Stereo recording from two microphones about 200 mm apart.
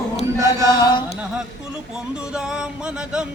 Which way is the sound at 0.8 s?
25° left (ahead or behind).